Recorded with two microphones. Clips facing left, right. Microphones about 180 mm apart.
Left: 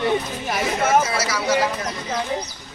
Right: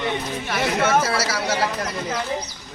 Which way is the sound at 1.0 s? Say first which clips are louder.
Right 1 dB; 30° right (ahead or behind).